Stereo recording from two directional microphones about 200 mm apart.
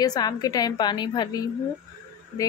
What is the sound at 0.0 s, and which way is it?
Speech, 20° left (ahead or behind).